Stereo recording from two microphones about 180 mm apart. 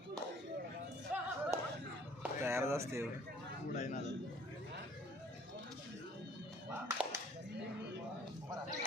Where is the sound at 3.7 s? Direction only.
40° left (ahead or behind).